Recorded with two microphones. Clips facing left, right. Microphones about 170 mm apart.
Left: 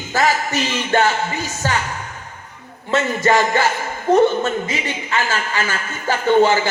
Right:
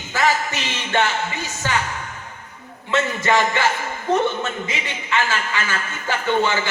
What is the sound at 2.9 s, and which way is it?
A man's voice, 40° left (ahead or behind).